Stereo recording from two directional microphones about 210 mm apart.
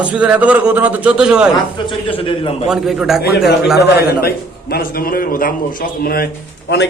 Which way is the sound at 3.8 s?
50° left (ahead or behind).